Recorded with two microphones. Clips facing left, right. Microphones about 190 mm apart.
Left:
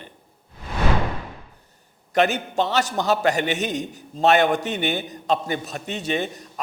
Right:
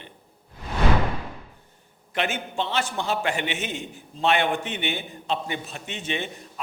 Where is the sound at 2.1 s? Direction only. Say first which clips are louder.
Left 7 dB; 40° left (ahead or behind).